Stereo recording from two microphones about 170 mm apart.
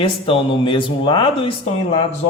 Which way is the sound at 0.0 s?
30° left (ahead or behind).